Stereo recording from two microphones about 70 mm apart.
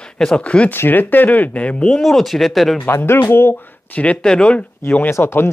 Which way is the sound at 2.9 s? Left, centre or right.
Left.